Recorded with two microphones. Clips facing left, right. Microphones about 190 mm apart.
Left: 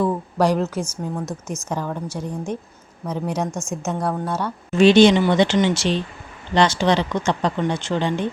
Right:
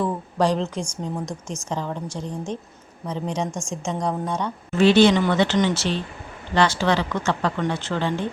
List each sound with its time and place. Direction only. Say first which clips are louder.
0.0 s a woman's voice: left 3 dB; 10° left (ahead or behind)
4.8 s a woman's voice: left 3 dB; 15° left (ahead or behind)